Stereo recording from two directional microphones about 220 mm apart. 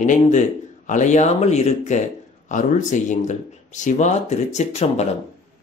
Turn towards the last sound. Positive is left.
turn(degrees=30)  # may be behind; listen again after turning